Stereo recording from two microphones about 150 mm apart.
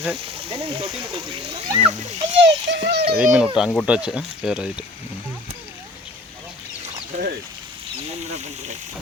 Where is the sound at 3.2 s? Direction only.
5° right (ahead or behind).